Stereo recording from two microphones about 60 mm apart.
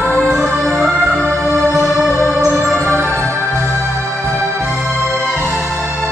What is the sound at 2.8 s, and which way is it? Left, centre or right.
Music, right.